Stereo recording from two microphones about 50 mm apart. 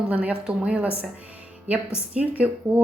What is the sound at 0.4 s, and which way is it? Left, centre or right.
Speech, right.